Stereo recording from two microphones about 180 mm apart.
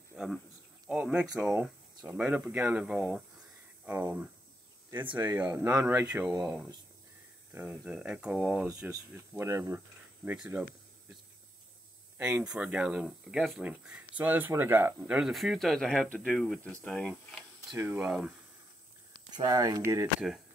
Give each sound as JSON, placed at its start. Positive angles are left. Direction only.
{"t": 0.1, "sound": "a sound", "side_deg": 0}
{"t": 0.8, "sound": "speech", "side_deg": -5}
{"t": 5.1, "sound": "speech", "side_deg": -10}
{"t": 7.5, "sound": "speech", "side_deg": -10}
{"t": 12.2, "sound": "speech", "side_deg": -5}
{"t": 17.7, "sound": "speech", "side_deg": -10}
{"t": 19.3, "sound": "speech", "side_deg": -20}